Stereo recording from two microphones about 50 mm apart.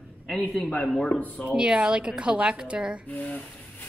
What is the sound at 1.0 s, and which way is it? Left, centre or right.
Speech, left.